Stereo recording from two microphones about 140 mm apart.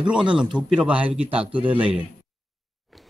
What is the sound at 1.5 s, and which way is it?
Speech, 35° right (ahead or behind).